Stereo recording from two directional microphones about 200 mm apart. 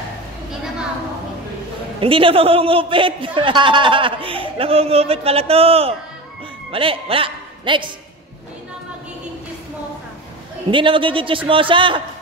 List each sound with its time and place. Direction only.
2.0 s a man's voice: 25° right (ahead or behind)
10.7 s a man's voice: 25° right (ahead or behind)